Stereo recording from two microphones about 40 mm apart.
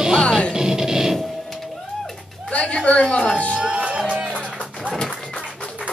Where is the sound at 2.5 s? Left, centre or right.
Left.